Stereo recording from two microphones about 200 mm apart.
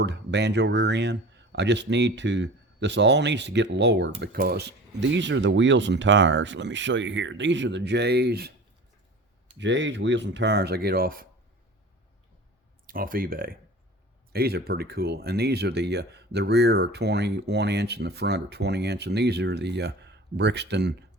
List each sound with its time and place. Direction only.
0.0 s speech: 60° right (ahead or behind)
9.6 s speech: 65° right (ahead or behind); by 11.3 s 45° right (ahead or behind)
12.9 s speech: 45° right (ahead or behind)